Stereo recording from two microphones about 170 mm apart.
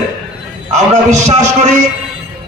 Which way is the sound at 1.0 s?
45° right (ahead or behind).